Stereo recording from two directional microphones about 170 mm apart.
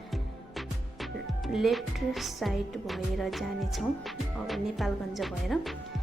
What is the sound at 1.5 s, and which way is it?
Speech, centre (ahead or behind).